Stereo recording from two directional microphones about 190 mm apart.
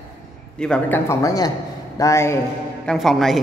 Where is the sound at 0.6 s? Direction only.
5° left (ahead or behind).